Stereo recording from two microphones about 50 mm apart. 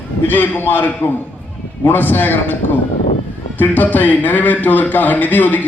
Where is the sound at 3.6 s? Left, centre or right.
Left.